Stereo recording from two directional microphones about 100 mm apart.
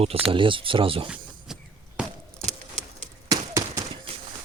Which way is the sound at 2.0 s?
10° right (ahead or behind).